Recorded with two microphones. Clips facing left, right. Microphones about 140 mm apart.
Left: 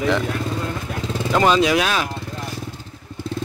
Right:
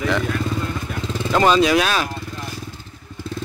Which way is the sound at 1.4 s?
15° left (ahead or behind).